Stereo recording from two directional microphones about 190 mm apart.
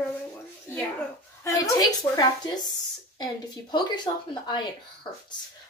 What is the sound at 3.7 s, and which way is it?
Speech, 20° left (ahead or behind).